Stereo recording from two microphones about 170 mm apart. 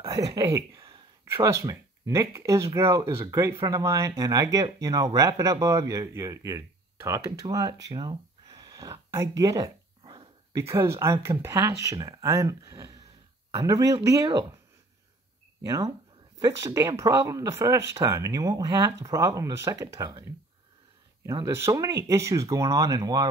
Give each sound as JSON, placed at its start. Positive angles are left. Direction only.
{"t": 0.0, "sound": "speech", "side_deg": -20}
{"t": 7.8, "sound": "a sound", "side_deg": -25}
{"t": 9.4, "sound": "dog", "side_deg": -20}
{"t": 10.6, "sound": "speech", "side_deg": -15}
{"t": 15.6, "sound": "speech", "side_deg": -20}
{"t": 21.5, "sound": "speech", "side_deg": -15}